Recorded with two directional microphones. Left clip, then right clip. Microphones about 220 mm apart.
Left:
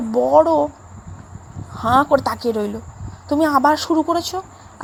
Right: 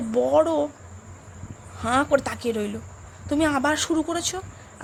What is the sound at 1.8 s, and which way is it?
Speech, 10° right (ahead or behind).